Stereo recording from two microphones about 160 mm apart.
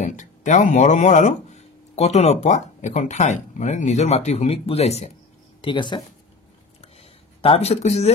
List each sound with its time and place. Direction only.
0.0 s speech: 50° left (ahead or behind)
5.6 s speech: 30° left (ahead or behind)
6.8 s a sound: 40° left (ahead or behind)